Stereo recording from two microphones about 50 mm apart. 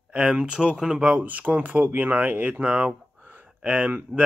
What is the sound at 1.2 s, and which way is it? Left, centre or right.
Speech, right.